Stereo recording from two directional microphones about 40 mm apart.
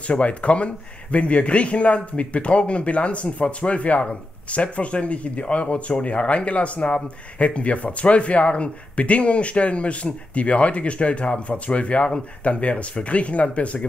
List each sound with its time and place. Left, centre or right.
0.0 s speech: left